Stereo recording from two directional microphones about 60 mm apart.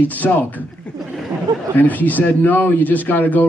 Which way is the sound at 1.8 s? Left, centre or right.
Left.